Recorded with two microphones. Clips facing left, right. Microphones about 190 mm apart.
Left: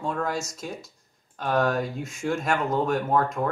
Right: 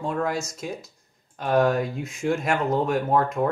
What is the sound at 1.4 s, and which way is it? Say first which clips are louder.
Speech: right 3 dB; 5° right (ahead or behind).